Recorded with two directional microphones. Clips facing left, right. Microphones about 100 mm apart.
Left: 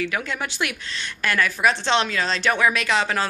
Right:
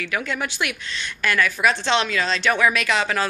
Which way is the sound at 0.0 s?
25° left (ahead or behind).